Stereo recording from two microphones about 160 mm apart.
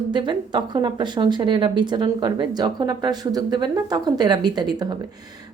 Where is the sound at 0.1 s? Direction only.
30° right (ahead or behind).